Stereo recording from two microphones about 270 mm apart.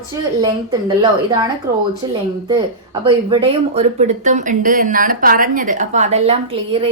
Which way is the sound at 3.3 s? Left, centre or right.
Right.